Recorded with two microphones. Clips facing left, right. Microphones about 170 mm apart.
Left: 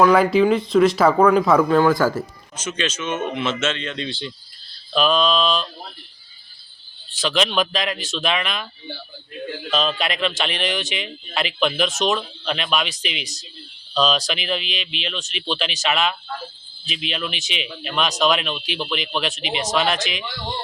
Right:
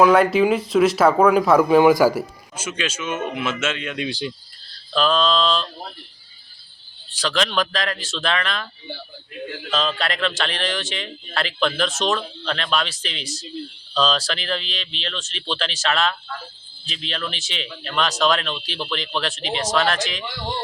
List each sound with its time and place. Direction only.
0.0 s speech: centre (ahead or behind)
4.9 s a man's voice: 15° left (ahead or behind)
7.1 s speech: 20° left (ahead or behind)
9.6 s a man's voice: 15° left (ahead or behind)